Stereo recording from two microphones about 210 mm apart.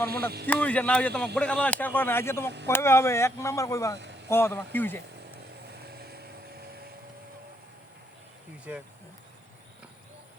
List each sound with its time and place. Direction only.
0.1 s speech: 50° right (ahead or behind)
0.4 s speech: 5° left (ahead or behind)
5.8 s vehicle: 50° right (ahead or behind)
8.7 s speech: 10° right (ahead or behind)